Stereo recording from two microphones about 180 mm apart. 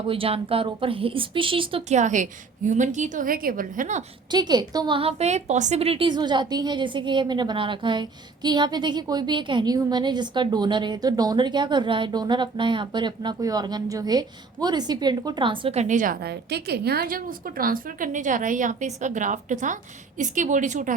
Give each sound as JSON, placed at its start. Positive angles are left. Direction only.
{"t": 0.1, "sound": "a woman's voice", "side_deg": -30}
{"t": 4.3, "sound": "a woman's voice", "side_deg": -25}
{"t": 16.2, "sound": "a woman's voice", "side_deg": -65}